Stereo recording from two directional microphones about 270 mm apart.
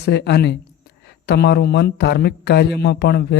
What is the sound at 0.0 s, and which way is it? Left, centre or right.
Speech, left.